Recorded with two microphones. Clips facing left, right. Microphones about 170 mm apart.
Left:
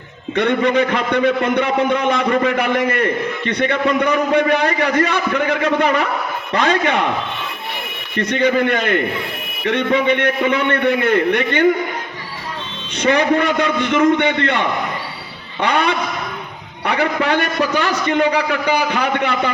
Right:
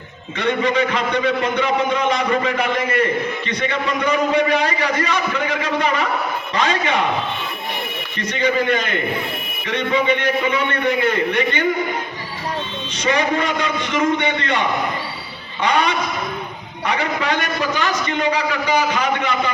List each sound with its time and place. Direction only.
0.3 s a man's voice: 55° left (ahead or behind)
8.1 s a man's voice: 60° left (ahead or behind)
13.0 s a man's voice: 60° left (ahead or behind)
15.6 s a man's voice: 60° left (ahead or behind)